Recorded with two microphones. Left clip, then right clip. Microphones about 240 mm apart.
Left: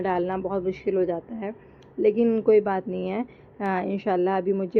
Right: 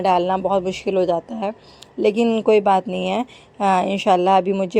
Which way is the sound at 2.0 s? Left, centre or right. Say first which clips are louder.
Right 3 dB; centre.